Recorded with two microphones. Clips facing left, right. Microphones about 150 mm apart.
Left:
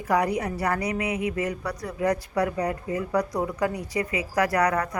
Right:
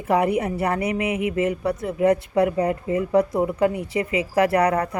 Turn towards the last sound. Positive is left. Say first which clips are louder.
# right 4 dB
turn(degrees=-30)  # may be behind; listen again after turning